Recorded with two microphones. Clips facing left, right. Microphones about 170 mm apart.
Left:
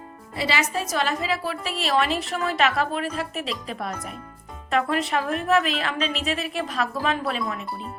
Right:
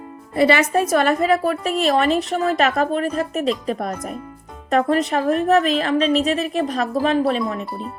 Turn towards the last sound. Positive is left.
turn(degrees=-35)  # may be behind; listen again after turning